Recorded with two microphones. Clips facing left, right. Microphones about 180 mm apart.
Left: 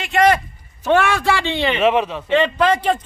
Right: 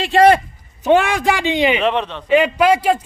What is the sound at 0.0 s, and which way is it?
Speech, 30° right (ahead or behind).